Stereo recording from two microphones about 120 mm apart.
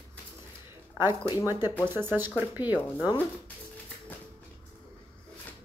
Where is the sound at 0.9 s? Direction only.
20° right (ahead or behind).